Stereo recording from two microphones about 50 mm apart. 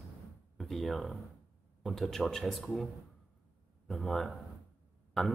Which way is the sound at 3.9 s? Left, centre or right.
Centre.